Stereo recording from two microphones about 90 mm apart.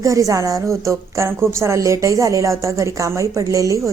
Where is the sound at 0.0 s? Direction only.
40° right (ahead or behind).